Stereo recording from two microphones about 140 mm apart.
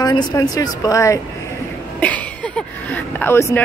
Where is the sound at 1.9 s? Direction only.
10° left (ahead or behind).